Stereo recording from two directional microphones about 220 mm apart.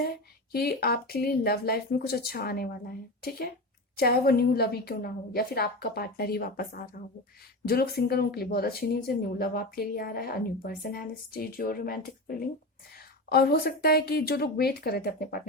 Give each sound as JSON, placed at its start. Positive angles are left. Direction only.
{"t": 0.5, "sound": "speech", "side_deg": 45}